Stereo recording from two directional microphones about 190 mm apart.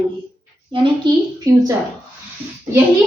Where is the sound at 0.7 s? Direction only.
25° right (ahead or behind).